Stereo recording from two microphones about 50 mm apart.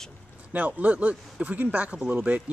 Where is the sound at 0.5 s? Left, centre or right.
Right.